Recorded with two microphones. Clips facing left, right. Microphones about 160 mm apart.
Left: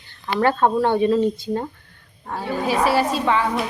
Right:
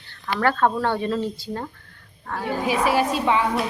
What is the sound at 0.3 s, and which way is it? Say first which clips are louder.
Speech: left 3 dB; 20° left (ahead or behind).